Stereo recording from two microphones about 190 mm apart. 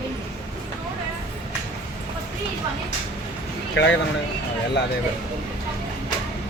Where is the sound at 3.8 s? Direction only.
65° left (ahead or behind).